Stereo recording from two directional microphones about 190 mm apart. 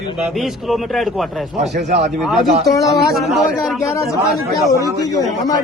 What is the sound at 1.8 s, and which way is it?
Speech, 35° right (ahead or behind).